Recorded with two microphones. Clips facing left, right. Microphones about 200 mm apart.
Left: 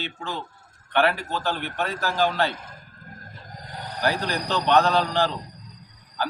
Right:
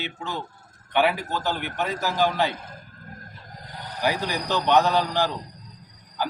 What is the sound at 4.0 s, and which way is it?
A man's voice, 10° right (ahead or behind).